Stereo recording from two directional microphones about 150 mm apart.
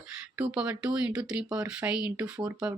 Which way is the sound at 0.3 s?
10° right (ahead or behind).